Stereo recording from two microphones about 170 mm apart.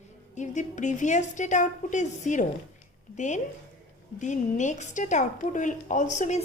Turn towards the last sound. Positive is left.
turn(degrees=45)  # may be behind; listen again after turning